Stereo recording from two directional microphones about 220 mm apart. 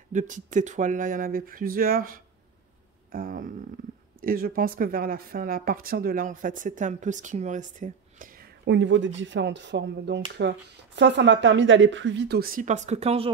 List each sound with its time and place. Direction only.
0.1 s a woman's voice: 35° right (ahead or behind)